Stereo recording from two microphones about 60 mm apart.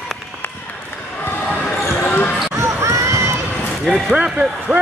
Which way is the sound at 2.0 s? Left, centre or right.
Left.